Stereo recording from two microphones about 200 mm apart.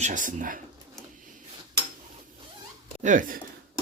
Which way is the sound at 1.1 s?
40° right (ahead or behind).